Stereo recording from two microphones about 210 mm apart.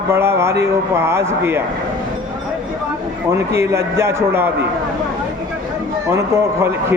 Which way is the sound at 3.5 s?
15° right (ahead or behind).